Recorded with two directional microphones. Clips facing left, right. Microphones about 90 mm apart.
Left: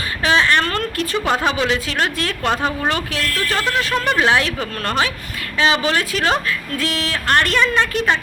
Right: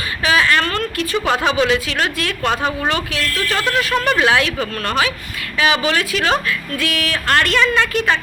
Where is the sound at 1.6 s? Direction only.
30° left (ahead or behind).